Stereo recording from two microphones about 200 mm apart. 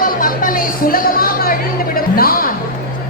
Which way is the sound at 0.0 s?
45° left (ahead or behind).